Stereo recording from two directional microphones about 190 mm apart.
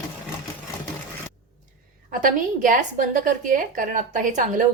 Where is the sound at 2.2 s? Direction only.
45° right (ahead or behind).